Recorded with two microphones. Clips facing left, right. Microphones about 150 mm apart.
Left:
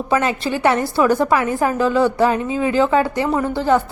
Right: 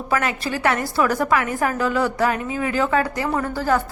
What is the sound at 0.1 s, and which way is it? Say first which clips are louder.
A woman's voice: left 4 dB; 25° left (ahead or behind).